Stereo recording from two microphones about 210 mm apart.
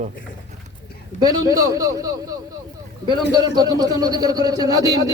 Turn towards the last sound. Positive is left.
turn(degrees=-15)  # may be behind; listen again after turning